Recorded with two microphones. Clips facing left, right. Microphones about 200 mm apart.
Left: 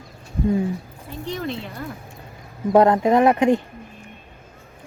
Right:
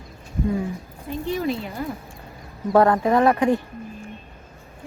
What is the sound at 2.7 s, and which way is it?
Speech, 20° left (ahead or behind).